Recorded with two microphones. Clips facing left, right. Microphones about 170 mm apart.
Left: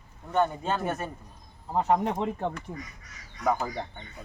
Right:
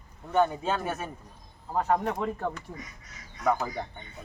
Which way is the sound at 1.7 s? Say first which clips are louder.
Left 2 dB; 20° left (ahead or behind).